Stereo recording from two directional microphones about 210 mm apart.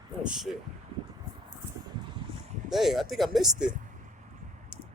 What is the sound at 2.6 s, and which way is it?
Speech, centre (ahead or behind).